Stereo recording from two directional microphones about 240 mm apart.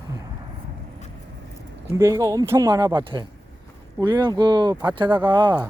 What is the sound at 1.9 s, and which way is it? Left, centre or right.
Speech, centre.